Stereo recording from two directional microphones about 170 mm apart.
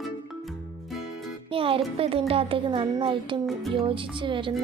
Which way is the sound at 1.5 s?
30° right (ahead or behind).